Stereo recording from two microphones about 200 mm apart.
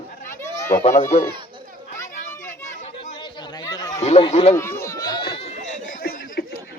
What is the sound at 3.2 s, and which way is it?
Chatter, 20° left (ahead or behind).